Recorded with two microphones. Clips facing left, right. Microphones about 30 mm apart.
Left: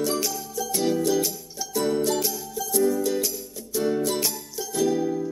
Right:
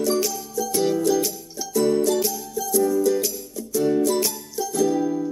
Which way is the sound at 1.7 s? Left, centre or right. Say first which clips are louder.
Right 4 dB; left.